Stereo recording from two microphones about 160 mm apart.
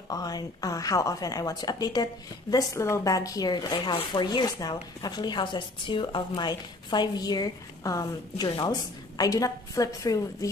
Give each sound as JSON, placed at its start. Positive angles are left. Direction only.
{"t": 0.1, "sound": "speech", "side_deg": 25}